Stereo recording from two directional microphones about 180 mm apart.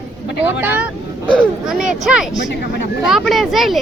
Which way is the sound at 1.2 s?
Centre (ahead or behind).